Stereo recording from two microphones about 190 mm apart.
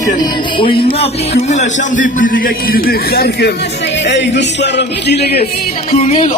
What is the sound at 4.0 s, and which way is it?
Speech, 70° left (ahead or behind).